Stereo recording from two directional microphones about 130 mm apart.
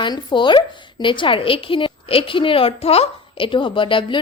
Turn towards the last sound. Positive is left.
turn(degrees=40)  # may be behind; listen again after turning